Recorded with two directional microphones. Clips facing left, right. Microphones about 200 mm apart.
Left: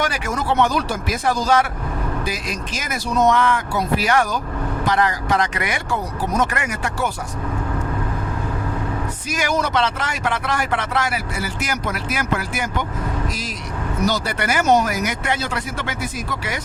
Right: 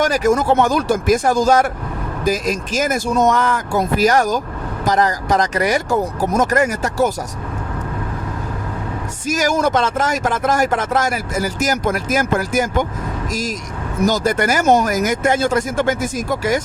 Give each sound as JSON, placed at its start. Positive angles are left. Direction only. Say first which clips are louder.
{"t": 0.0, "sound": "speech", "louder": "right 8 dB", "side_deg": -40}
{"t": 9.2, "sound": "speech", "louder": "right 6 dB", "side_deg": -45}
{"t": 14.0, "sound": "speech", "louder": "right 6 dB", "side_deg": -45}